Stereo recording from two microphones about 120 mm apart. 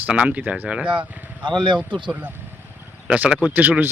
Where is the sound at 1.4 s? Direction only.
40° right (ahead or behind).